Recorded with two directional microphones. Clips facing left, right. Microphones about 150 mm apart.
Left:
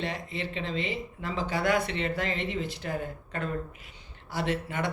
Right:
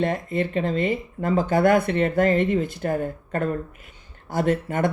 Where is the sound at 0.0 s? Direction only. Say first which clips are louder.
Right 10 dB; 50° right (ahead or behind).